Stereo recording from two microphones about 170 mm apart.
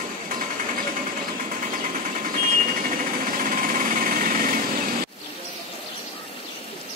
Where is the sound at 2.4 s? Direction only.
55° right (ahead or behind).